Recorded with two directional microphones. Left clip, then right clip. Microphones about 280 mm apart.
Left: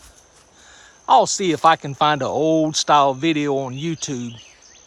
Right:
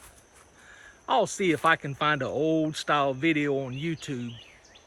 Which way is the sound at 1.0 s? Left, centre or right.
Centre.